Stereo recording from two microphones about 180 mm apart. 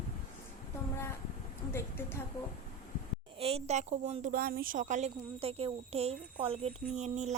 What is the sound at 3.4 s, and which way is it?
A woman's voice, 35° right (ahead or behind).